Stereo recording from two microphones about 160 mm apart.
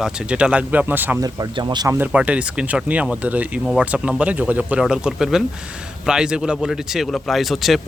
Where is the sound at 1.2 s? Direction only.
25° right (ahead or behind).